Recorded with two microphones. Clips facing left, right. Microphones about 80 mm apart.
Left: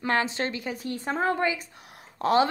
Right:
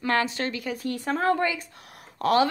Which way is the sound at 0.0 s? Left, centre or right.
Left.